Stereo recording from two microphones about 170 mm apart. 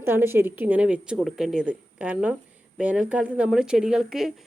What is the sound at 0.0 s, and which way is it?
A woman's voice, 15° right (ahead or behind).